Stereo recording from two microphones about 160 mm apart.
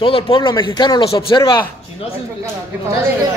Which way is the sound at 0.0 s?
30° left (ahead or behind).